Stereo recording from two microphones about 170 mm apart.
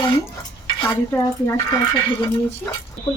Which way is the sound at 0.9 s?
15° left (ahead or behind).